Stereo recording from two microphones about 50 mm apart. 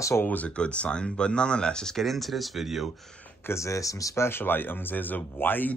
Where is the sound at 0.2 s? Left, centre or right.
Left.